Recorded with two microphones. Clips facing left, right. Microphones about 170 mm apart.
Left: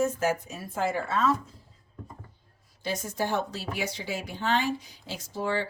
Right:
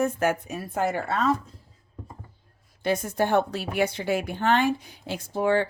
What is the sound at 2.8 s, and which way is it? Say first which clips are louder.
A woman's voice: right 6 dB; 55° right (ahead or behind).